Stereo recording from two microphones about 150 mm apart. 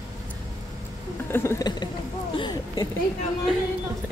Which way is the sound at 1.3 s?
15° left (ahead or behind).